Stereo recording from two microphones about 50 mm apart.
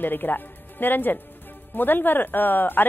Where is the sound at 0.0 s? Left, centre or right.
Left.